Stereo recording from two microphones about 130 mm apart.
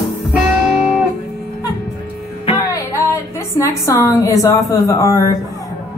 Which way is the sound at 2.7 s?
25° left (ahead or behind).